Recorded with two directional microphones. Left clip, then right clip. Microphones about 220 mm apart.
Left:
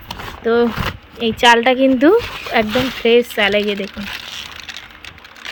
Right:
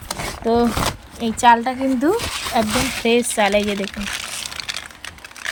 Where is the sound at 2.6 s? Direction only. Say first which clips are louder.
Left 4 dB; 10° right (ahead or behind).